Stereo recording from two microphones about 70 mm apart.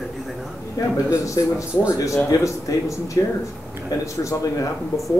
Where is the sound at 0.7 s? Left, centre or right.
Left.